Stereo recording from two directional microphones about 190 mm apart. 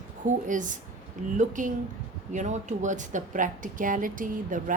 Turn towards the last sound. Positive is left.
turn(degrees=-45)  # may be behind; listen again after turning